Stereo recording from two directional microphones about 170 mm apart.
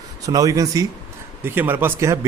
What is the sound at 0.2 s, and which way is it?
Speech, 20° right (ahead or behind).